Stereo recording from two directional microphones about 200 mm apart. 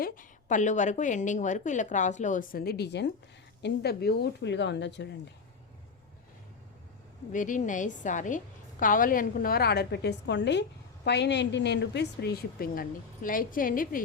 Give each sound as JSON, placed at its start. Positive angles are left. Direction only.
{"t": 0.0, "sound": "a woman's voice", "side_deg": 40}
{"t": 7.3, "sound": "a woman's voice", "side_deg": 40}